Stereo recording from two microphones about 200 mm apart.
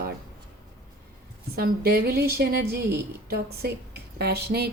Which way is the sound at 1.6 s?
50° right (ahead or behind).